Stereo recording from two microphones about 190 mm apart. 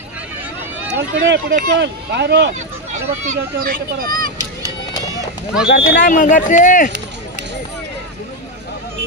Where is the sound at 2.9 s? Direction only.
40° right (ahead or behind).